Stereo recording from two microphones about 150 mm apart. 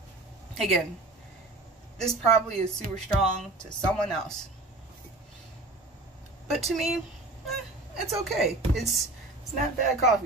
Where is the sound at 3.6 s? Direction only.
5° left (ahead or behind).